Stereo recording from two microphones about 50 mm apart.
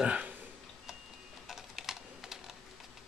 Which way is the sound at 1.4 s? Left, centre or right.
Centre.